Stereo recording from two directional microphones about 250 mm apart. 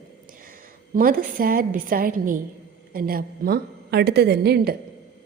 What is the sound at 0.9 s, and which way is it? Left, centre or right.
A woman's voice, right.